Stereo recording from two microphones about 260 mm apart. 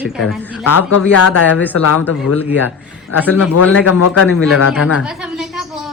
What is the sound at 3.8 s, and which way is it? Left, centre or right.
Speech, left.